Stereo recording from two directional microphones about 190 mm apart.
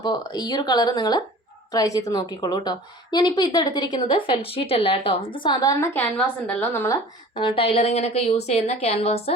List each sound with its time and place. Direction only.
0.0 s a woman's voice: 20° left (ahead or behind)
7.3 s a woman's voice: 30° left (ahead or behind)